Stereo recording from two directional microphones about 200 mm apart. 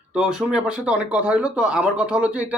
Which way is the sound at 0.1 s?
5° right (ahead or behind).